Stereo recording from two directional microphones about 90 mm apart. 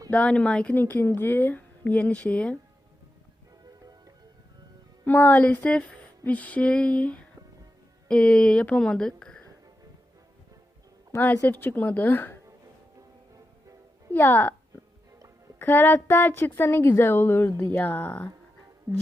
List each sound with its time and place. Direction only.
0.1 s a woman's voice: 15° left (ahead or behind)
5.0 s speech: 20° left (ahead or behind)
11.4 s a woman's voice: 20° left (ahead or behind)
14.1 s a woman's voice: 25° left (ahead or behind)
15.5 s a woman's voice: 25° left (ahead or behind)
18.9 s music: 40° right (ahead or behind)